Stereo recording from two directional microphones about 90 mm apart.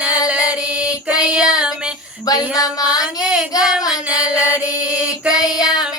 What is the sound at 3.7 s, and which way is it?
Child singing, 5° right (ahead or behind).